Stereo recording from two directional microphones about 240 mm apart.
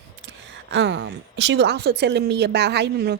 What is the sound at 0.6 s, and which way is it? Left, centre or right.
A woman's voice, right.